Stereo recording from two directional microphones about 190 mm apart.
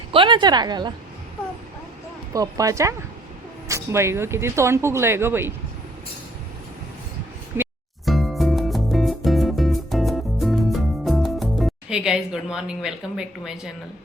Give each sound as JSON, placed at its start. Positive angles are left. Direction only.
{"t": 0.1, "sound": "speech", "side_deg": -25}
{"t": 2.3, "sound": "speech", "side_deg": -20}
{"t": 7.6, "sound": "music", "side_deg": -10}
{"t": 8.0, "sound": "music", "side_deg": 0}